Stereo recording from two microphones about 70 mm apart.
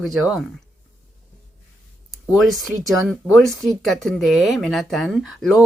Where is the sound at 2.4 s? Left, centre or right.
Centre.